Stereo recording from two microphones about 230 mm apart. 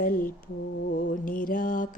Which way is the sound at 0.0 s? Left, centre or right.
Left.